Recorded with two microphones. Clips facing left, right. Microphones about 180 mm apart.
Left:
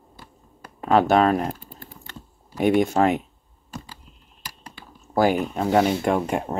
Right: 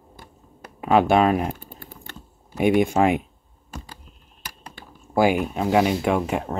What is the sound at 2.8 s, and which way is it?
Speech, 10° right (ahead or behind).